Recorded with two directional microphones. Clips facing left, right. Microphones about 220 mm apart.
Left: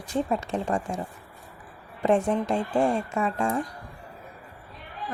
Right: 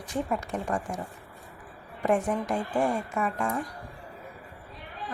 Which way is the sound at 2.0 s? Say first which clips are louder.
Left 3 dB; 25° left (ahead or behind).